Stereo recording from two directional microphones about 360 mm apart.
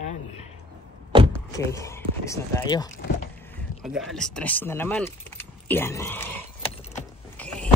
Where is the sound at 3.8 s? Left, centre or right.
Centre.